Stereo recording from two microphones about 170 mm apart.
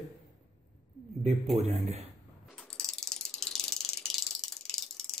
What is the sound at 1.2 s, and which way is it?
Speech, 40° right (ahead or behind).